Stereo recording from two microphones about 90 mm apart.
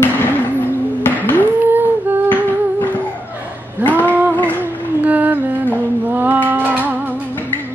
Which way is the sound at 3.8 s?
20° left (ahead or behind).